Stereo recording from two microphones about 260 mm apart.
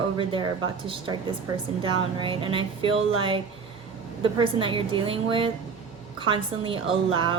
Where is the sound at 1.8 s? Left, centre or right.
Centre.